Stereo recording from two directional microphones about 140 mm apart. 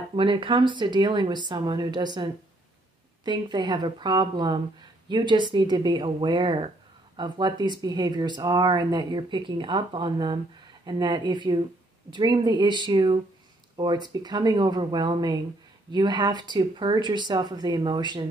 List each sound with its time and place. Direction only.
0.1 s speech: 35° right (ahead or behind)